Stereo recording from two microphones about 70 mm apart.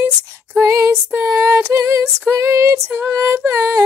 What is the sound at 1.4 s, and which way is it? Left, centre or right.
Female singing, right.